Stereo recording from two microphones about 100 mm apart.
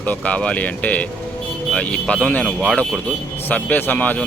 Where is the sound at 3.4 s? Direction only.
20° left (ahead or behind).